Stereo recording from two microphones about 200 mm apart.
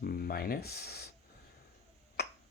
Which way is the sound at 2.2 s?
50° left (ahead or behind).